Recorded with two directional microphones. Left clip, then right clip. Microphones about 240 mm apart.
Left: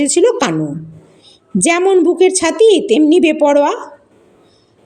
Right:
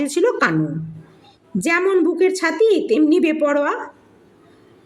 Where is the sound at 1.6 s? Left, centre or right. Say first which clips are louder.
Left 6 dB; centre.